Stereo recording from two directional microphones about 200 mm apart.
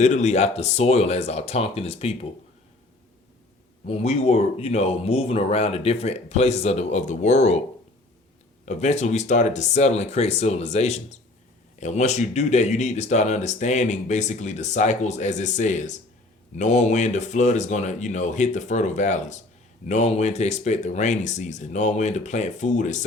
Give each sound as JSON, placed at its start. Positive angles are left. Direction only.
{"t": 0.0, "sound": "speech", "side_deg": 35}
{"t": 3.8, "sound": "speech", "side_deg": 30}
{"t": 8.6, "sound": "speech", "side_deg": 35}